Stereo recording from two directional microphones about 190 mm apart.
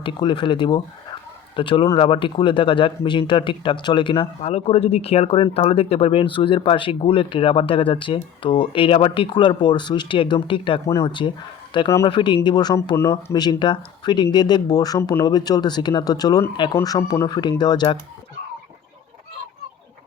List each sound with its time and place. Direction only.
0.0 s speech: 25° left (ahead or behind)